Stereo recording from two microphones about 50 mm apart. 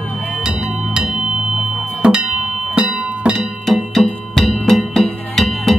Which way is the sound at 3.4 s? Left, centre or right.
Centre.